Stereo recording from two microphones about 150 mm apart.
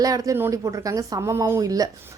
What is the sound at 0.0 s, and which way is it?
Speech, 20° right (ahead or behind).